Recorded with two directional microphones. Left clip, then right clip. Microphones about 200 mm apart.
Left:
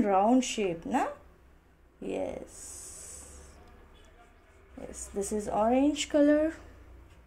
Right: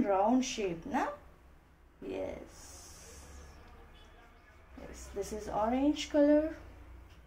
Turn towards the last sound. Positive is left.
turn(degrees=55)  # may be behind; listen again after turning